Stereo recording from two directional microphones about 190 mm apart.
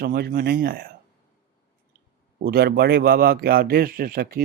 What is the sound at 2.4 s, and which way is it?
Speech, 55° right (ahead or behind).